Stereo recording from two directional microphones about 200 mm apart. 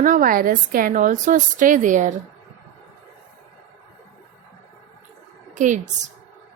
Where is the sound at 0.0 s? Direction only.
45° right (ahead or behind).